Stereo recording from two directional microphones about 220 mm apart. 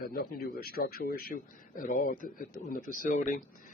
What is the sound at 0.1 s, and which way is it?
A man's voice, 40° left (ahead or behind).